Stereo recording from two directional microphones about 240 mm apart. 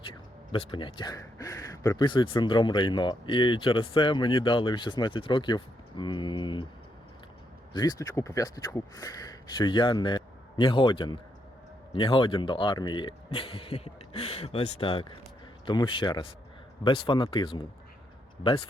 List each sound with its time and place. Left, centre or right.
0.0 s speech: left
7.7 s speech: centre